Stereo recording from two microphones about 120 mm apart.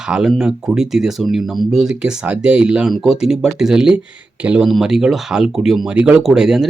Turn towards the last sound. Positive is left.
turn(degrees=-5)  # may be behind; listen again after turning